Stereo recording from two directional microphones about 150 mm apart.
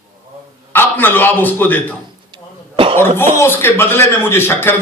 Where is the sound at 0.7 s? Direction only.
15° left (ahead or behind).